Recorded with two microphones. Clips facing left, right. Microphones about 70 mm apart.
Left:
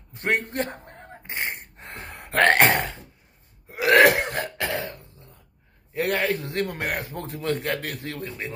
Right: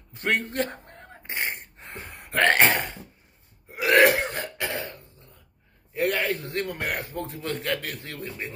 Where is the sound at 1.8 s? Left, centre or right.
Left.